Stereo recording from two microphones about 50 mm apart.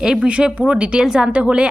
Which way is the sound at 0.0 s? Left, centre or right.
Centre.